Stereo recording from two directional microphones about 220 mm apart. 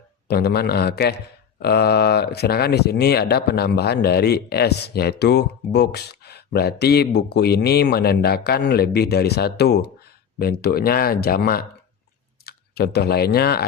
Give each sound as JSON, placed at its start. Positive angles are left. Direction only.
{"t": 0.3, "sound": "speech", "side_deg": 45}